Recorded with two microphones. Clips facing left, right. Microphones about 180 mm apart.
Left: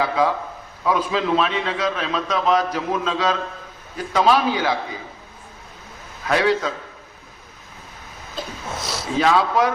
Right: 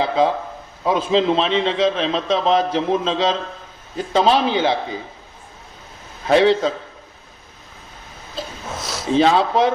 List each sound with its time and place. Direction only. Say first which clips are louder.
0.0 s a man's voice: right 2 dB; 25° right (ahead or behind)
6.2 s a man's voice: right 5 dB; 25° right (ahead or behind)
9.1 s a man's voice: right 3 dB; 25° right (ahead or behind)